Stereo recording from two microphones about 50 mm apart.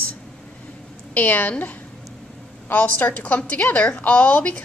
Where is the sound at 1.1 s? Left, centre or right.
Left.